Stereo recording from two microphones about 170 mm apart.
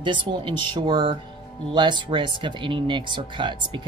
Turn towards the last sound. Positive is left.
turn(degrees=-30)  # may be behind; listen again after turning